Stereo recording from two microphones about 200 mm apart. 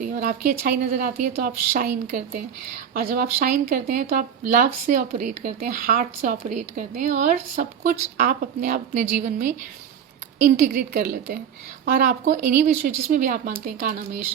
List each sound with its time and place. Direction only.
0.0 s a sound: 50° right (ahead or behind)
0.6 s speech: 45° right (ahead or behind)
10.4 s speech: 45° right (ahead or behind)